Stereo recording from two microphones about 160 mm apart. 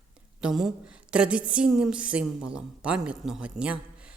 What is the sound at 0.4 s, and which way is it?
A woman's voice, 5° right (ahead or behind).